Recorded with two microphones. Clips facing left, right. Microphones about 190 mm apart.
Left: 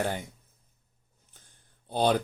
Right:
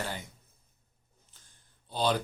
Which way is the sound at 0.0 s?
55° left (ahead or behind).